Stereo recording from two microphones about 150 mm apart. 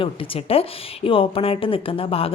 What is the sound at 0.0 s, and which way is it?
A woman's voice, 40° left (ahead or behind).